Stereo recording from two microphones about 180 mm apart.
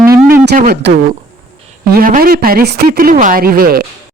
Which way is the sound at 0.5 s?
50° right (ahead or behind).